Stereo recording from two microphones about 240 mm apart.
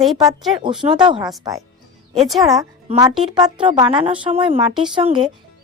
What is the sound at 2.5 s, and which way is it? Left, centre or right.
A woman's voice, centre.